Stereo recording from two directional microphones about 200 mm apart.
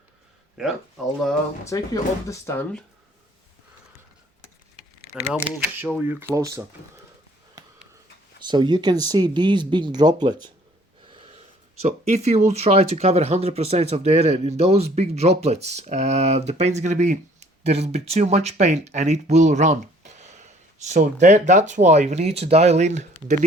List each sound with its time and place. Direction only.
0.6 s speech: 5° right (ahead or behind)
1.6 s speech: 15° left (ahead or behind)
5.7 s speech: 10° right (ahead or behind)
8.4 s speech: 20° right (ahead or behind)
11.8 s speech: 35° right (ahead or behind)